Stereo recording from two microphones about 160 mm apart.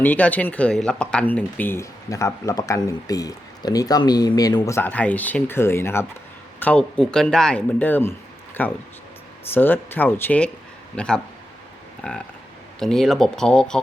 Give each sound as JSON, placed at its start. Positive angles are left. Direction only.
{"t": 0.0, "sound": "speech", "side_deg": 10}